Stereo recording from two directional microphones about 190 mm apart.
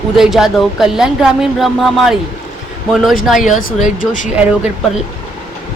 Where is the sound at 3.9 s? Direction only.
45° left (ahead or behind).